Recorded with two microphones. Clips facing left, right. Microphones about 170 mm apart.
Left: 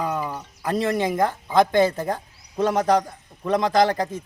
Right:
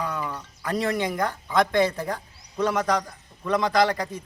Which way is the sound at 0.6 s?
25° left (ahead or behind).